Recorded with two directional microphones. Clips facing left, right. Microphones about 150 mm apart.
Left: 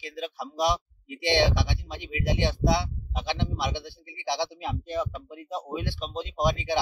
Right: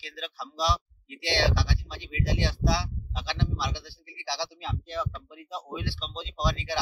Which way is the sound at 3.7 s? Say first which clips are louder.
Left 5 dB; 55° left (ahead or behind).